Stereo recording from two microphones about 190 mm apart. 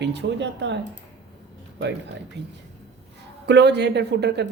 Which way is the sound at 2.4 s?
65° right (ahead or behind).